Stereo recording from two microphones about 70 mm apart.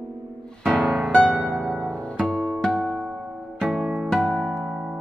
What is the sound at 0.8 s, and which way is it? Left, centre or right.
Music, centre.